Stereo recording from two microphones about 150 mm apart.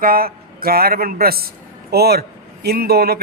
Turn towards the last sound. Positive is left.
turn(degrees=-90)